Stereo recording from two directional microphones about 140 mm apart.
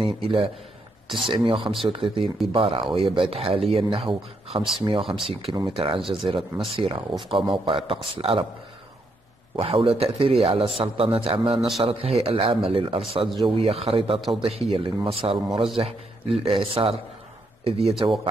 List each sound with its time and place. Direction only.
0.0 s speech: 40° right (ahead or behind)
2.2 s speech: centre (ahead or behind)
2.5 s speech: 40° right (ahead or behind)
9.6 s speech: 40° right (ahead or behind)